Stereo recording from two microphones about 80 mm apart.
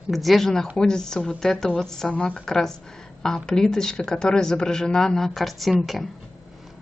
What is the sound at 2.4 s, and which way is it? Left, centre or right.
A woman's voice, centre.